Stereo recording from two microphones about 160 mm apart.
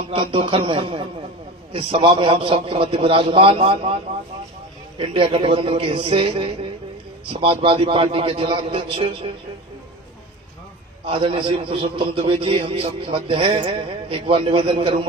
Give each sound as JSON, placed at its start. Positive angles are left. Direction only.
{"t": 0.1, "sound": "a man's voice", "side_deg": -35}
{"t": 4.9, "sound": "a man's voice", "side_deg": -35}
{"t": 11.0, "sound": "a man's voice", "side_deg": -35}